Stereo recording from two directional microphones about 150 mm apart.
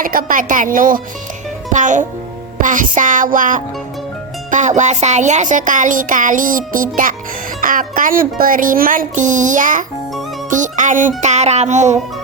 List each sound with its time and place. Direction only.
0.0 s speech: 65° right (ahead or behind)
11.2 s music: 50° right (ahead or behind)